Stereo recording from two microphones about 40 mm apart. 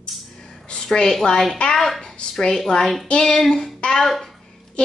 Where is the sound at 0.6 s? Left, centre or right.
Centre.